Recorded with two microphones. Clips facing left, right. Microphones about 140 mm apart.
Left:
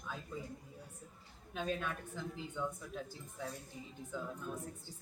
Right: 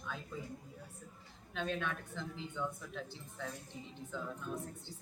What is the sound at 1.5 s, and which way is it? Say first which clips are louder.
A woman's voice: even; 5° left (ahead or behind).